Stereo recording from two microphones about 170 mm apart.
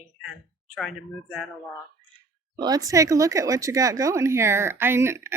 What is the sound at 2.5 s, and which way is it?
Speech, 25° right (ahead or behind).